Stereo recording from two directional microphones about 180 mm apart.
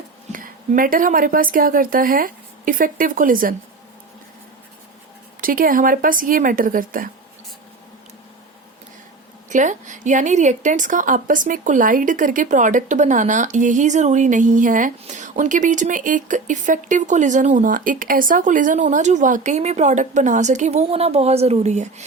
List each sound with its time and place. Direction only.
0.3 s speech: 50° right (ahead or behind)
5.4 s a woman's voice: 50° right (ahead or behind)
9.5 s a woman's voice: 45° right (ahead or behind)